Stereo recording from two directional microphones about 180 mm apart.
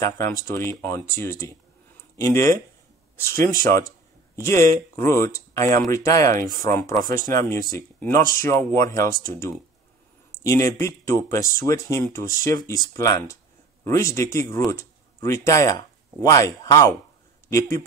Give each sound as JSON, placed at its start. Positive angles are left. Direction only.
{"t": 0.5, "sound": "speech", "side_deg": 15}
{"t": 10.4, "sound": "speech", "side_deg": 15}